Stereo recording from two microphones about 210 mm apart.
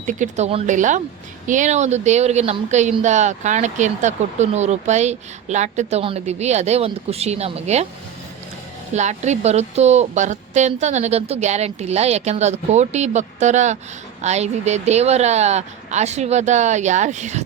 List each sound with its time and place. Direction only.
0.0 s speech: 35° right (ahead or behind)
8.9 s speech: 35° right (ahead or behind)